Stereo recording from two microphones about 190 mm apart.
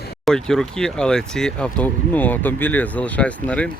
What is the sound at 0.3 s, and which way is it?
Speech, centre (ahead or behind).